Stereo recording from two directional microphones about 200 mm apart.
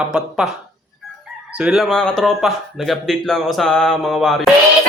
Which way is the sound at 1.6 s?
5° right (ahead or behind).